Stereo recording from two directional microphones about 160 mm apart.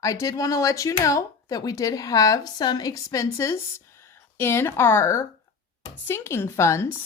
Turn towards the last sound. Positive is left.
turn(degrees=15)  # may be behind; listen again after turning